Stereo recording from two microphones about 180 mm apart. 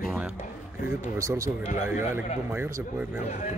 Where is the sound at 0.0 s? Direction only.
5° right (ahead or behind).